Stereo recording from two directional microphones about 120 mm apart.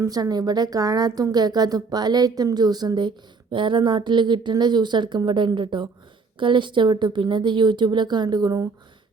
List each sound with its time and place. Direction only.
0.0 s a woman's voice: 30° right (ahead or behind)